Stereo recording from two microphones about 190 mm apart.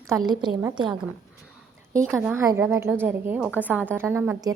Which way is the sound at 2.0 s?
15° right (ahead or behind).